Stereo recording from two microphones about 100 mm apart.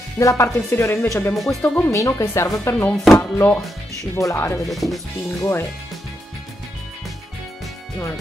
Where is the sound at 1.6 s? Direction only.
15° left (ahead or behind).